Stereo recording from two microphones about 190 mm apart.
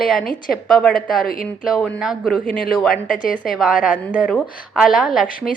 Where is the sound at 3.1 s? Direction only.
45° left (ahead or behind).